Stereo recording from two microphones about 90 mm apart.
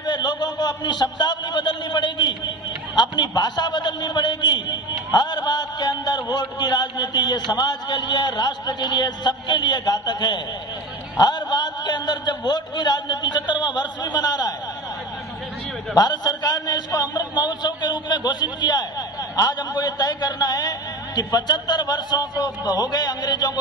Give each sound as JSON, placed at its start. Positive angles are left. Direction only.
{"t": 0.0, "sound": "a man's voice", "side_deg": 55}
{"t": 15.9, "sound": "a man's voice", "side_deg": 50}